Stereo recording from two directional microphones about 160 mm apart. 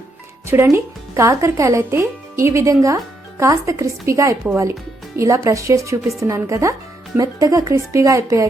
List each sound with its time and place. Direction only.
0.4 s speech: 15° right (ahead or behind)